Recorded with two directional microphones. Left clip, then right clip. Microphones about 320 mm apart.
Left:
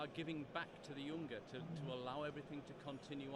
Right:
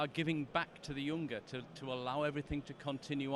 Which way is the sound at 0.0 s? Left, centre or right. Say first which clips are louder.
Right 10 dB; right.